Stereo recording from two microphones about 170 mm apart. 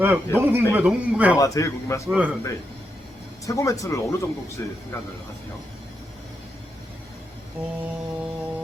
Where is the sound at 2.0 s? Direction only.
5° right (ahead or behind).